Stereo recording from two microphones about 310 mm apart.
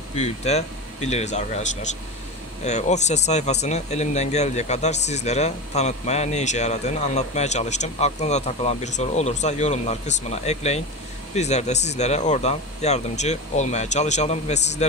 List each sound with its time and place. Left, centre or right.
0.1 s speech: left